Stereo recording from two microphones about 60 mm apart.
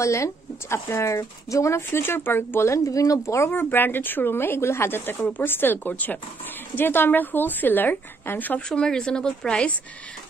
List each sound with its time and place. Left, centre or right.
0.0 s speech: left
1.8 s a woman's voice: left
2.7 s speech: left
3.4 s a woman's voice: left
8.6 s speech: centre